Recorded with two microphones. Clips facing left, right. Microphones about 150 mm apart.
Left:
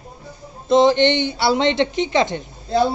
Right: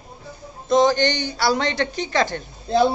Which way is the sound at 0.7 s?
25° left (ahead or behind).